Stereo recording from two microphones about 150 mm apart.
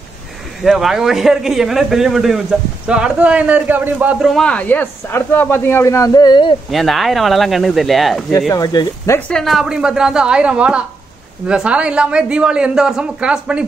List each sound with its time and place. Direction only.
0.6 s a man's voice: centre (ahead or behind); by 6.5 s 30° left (ahead or behind)
6.7 s a man's voice: centre (ahead or behind)
8.3 s speech: 20° left (ahead or behind)
9.3 s a man's voice: centre (ahead or behind)